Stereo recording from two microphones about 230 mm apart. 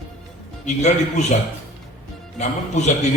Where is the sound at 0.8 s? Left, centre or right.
Left.